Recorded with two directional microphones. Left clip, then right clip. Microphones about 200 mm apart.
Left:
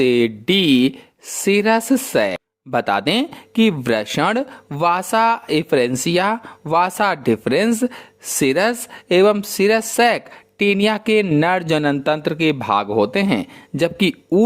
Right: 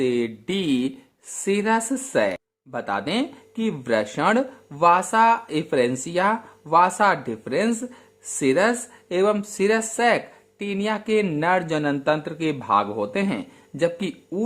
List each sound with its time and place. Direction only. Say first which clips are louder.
0.0 s speech: left 7 dB; 40° left (ahead or behind)